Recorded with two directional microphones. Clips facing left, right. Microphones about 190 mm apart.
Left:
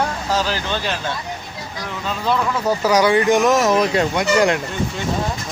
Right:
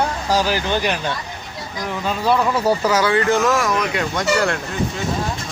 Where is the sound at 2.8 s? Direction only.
15° left (ahead or behind); by 4.0 s 30° left (ahead or behind).